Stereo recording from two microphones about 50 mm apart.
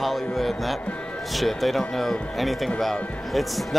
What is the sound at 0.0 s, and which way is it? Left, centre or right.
Music, centre.